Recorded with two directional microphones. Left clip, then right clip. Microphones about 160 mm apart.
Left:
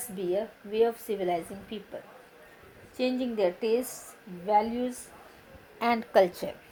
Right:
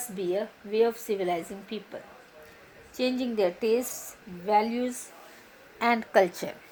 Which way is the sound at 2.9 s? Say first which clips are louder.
Right 1 dB; 35° right (ahead or behind).